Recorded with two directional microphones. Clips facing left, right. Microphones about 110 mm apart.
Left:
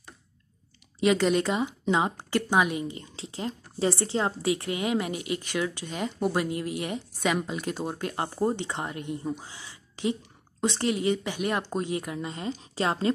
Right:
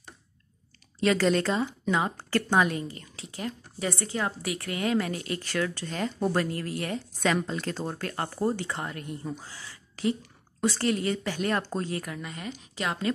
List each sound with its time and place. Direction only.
1.0 s a woman's voice: 15° left (ahead or behind); by 13.1 s 30° left (ahead or behind)